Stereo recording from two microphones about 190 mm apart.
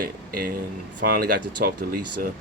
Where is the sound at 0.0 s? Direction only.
50° right (ahead or behind).